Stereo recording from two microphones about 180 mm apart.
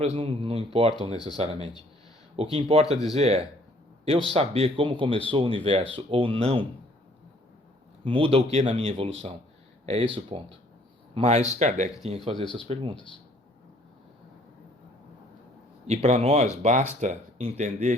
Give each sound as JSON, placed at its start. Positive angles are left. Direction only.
{"t": 0.0, "sound": "speech", "side_deg": -35}
{"t": 1.1, "sound": "speech", "side_deg": 25}
{"t": 1.4, "sound": "speech", "side_deg": -35}
{"t": 8.0, "sound": "speech", "side_deg": -30}
{"t": 15.9, "sound": "speech", "side_deg": -35}